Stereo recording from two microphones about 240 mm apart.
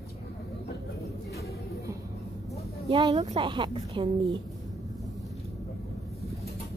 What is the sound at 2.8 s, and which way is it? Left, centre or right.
A woman's voice, right.